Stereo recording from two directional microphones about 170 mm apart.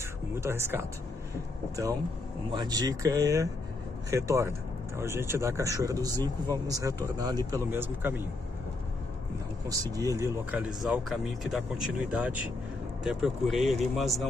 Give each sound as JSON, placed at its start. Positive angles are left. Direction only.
{"t": 0.4, "sound": "speech", "side_deg": -15}
{"t": 2.5, "sound": "speech", "side_deg": -25}
{"t": 9.7, "sound": "speech", "side_deg": -20}
{"t": 10.9, "sound": "speech", "side_deg": 0}